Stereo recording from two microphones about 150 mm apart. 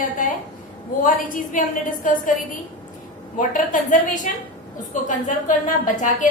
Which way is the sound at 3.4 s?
60° left (ahead or behind).